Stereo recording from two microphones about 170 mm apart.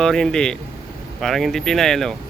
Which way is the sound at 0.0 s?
5° left (ahead or behind).